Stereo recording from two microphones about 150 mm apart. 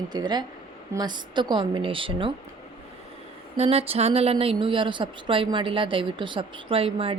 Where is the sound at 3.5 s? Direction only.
40° right (ahead or behind).